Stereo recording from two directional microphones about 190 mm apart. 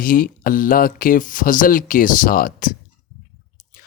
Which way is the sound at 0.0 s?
45° left (ahead or behind).